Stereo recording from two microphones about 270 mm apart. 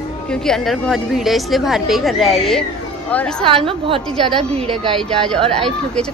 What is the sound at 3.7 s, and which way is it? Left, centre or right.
Speech, centre.